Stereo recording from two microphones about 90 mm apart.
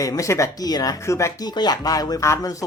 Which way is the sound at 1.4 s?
50° left (ahead or behind).